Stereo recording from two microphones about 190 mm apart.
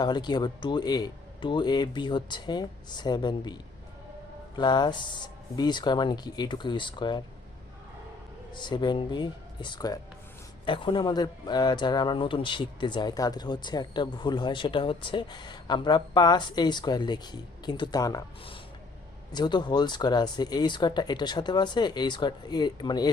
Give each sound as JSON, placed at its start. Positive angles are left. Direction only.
{"t": 0.0, "sound": "speech", "side_deg": 20}
{"t": 8.5, "sound": "speech", "side_deg": 25}